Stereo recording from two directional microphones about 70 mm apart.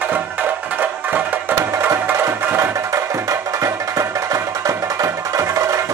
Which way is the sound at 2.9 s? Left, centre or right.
Right.